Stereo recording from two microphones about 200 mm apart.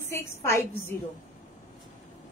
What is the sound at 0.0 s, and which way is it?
Speech, 15° left (ahead or behind).